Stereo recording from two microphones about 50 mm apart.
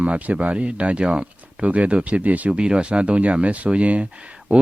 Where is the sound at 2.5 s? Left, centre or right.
Centre.